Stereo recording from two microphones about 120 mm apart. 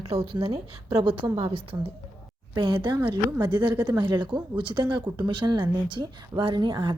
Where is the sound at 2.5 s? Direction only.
40° right (ahead or behind).